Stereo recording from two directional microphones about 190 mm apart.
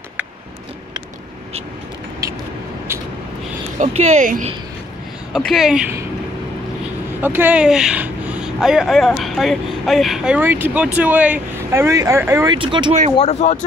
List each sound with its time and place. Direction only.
3.8 s speech: 35° right (ahead or behind)
5.3 s speech: centre (ahead or behind)
7.2 s speech: 10° right (ahead or behind)
12.5 s speech: 25° right (ahead or behind)
13.1 s speech: 35° left (ahead or behind)